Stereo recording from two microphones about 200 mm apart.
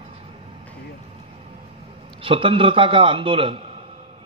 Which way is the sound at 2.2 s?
25° right (ahead or behind).